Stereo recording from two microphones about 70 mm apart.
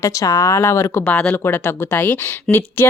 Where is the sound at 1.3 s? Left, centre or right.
Left.